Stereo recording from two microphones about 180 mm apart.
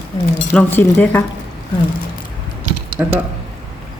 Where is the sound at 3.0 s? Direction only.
5° right (ahead or behind).